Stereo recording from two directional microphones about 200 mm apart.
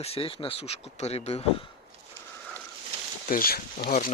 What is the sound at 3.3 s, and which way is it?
Speech, 45° left (ahead or behind).